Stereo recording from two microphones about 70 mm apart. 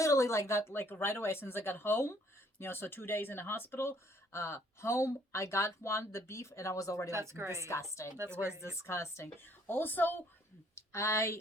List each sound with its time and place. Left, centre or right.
0.0 s speech: left
7.1 s a woman's voice: right
7.7 s speech: left
9.4 s a woman's voice: left
10.8 s speech: left